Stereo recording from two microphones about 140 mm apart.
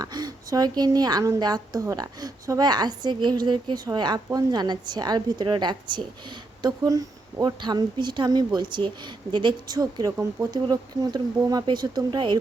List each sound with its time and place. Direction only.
0.0 s a woman's voice: 30° right (ahead or behind)